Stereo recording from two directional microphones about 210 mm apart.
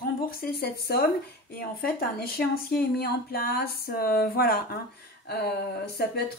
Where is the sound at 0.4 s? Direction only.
50° left (ahead or behind).